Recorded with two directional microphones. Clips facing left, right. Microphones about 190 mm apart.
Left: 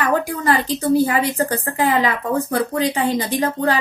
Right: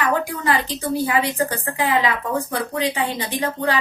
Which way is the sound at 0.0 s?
45° left (ahead or behind).